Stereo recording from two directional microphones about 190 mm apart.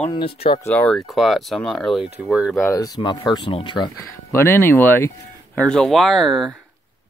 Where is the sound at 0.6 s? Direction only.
10° left (ahead or behind).